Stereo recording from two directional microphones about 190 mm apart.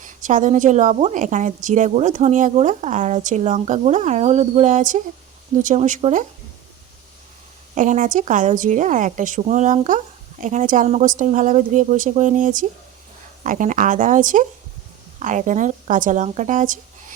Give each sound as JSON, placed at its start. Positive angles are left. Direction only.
{"t": 0.0, "sound": "a woman's voice", "side_deg": -40}
{"t": 7.8, "sound": "a woman's voice", "side_deg": -40}